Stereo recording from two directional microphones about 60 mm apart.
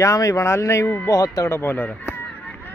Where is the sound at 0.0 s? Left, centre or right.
Left.